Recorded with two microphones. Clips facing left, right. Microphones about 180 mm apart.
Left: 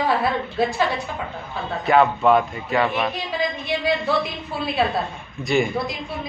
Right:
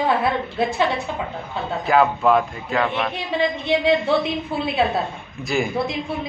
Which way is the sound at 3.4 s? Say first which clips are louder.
Right 6 dB; 25° right (ahead or behind).